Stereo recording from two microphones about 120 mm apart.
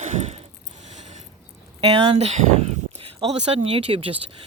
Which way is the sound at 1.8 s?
50° right (ahead or behind).